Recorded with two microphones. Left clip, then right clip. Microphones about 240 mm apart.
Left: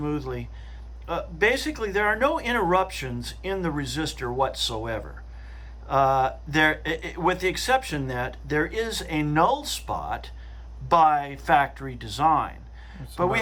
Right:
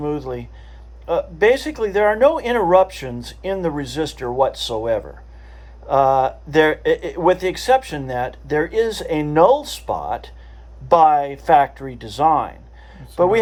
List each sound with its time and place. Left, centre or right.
1.0 s speech: centre